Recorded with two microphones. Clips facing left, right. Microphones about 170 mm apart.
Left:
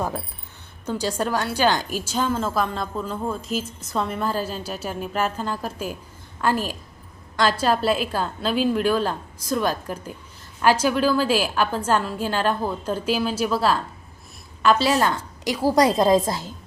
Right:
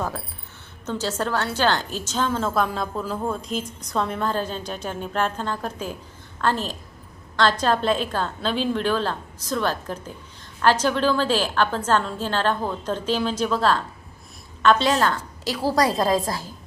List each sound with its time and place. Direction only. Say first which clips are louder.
0.9 s a woman's voice: left 1 dB; 15° left (ahead or behind)